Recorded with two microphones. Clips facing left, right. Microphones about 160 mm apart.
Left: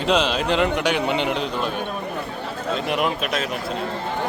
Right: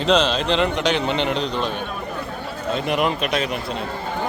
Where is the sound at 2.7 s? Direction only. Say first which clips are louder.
Right 2 dB; centre (ahead or behind).